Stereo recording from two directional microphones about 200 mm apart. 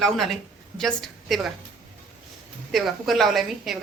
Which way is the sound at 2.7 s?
Centre (ahead or behind).